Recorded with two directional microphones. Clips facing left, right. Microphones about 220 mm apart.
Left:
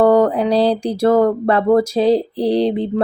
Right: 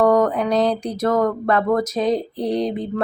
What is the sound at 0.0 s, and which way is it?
A woman's voice, 30° left (ahead or behind).